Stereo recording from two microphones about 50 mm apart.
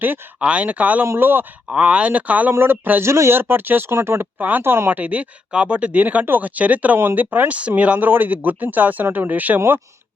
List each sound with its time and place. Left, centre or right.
0.3 s speech: right
1.0 s speech: right
1.7 s speech: right
2.5 s speech: right
3.0 s speech: right
3.3 s speech: right
3.9 s speech: right
4.4 s speech: right
4.6 s speech: right
4.9 s speech: right
8.0 s speech: right
9.0 s speech: right
9.3 s speech: right
9.6 s speech: right